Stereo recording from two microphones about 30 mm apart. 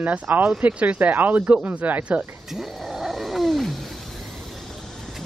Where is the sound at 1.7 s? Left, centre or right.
Right.